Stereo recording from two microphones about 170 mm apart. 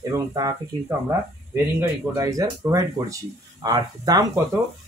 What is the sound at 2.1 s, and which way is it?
Speech, 20° right (ahead or behind).